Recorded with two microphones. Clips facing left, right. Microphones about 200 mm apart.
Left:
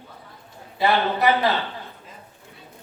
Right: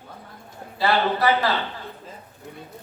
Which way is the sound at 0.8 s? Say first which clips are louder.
Even; 20° left (ahead or behind).